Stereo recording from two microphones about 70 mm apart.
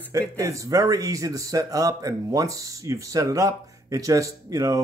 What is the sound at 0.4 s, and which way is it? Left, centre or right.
Speech, right.